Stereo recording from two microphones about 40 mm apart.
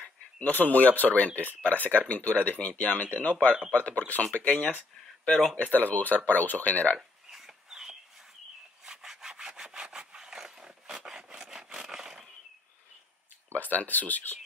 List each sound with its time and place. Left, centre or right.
0.4 s speech: left
5.6 s speech: left
7.3 s a sound: centre
8.8 s sawing: centre
11.1 s rub: centre
13.5 s speech: left